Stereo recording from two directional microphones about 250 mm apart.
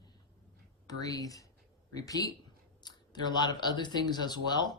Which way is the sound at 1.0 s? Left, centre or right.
Centre.